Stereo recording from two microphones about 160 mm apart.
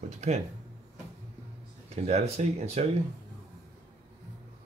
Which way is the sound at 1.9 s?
40° right (ahead or behind).